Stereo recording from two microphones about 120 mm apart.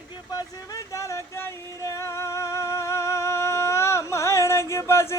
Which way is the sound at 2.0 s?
20° left (ahead or behind).